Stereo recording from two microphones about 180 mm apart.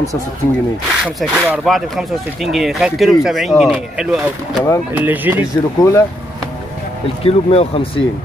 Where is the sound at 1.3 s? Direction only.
5° right (ahead or behind).